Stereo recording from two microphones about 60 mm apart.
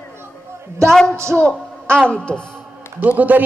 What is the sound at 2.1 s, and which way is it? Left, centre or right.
Speech, centre.